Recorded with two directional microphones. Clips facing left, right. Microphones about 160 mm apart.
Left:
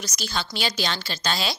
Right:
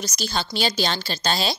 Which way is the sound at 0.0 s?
30° right (ahead or behind).